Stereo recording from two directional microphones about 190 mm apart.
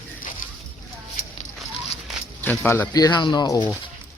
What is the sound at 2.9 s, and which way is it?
Speech, 20° left (ahead or behind).